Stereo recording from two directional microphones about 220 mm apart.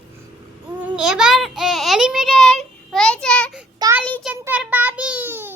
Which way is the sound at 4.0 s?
5° left (ahead or behind).